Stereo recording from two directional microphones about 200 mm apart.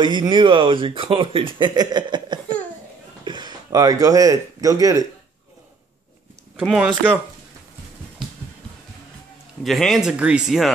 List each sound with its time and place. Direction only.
0.0 s speech: 25° right (ahead or behind)
6.6 s speech: centre (ahead or behind)
9.6 s speech: centre (ahead or behind)